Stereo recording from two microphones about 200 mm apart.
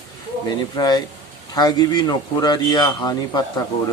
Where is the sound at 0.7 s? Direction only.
20° left (ahead or behind).